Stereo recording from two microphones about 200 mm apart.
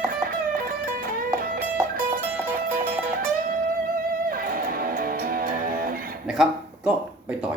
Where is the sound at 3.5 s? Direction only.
45° right (ahead or behind).